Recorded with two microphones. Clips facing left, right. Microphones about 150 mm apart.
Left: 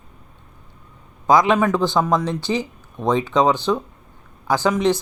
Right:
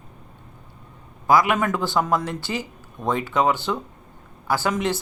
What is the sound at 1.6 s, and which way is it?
Speech, 15° left (ahead or behind).